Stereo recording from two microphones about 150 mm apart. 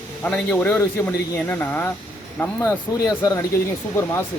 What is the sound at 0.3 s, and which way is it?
A man's voice, 10° left (ahead or behind).